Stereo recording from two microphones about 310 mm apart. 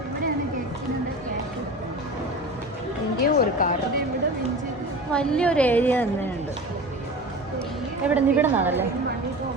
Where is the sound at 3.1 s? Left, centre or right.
Left.